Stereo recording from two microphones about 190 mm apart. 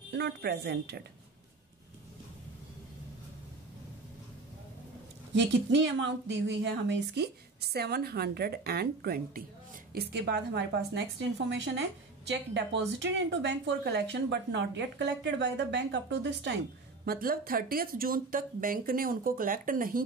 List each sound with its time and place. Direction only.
0.1 s a woman's voice: 60° right (ahead or behind)
5.3 s a woman's voice: 70° right (ahead or behind)
7.7 s a woman's voice: 55° right (ahead or behind)
17.0 s speech: 50° right (ahead or behind)